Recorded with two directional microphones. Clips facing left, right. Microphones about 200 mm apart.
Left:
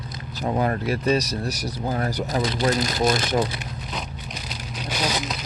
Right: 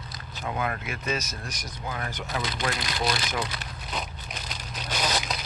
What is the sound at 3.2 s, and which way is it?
Speech, 30° left (ahead or behind).